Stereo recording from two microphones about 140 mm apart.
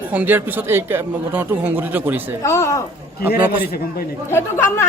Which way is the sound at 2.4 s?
20° left (ahead or behind).